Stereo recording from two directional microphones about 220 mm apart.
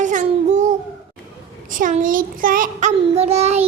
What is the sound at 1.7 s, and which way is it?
Child singing, 35° right (ahead or behind).